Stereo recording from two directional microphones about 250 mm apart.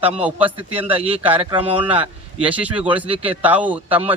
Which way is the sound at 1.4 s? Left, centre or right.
Right.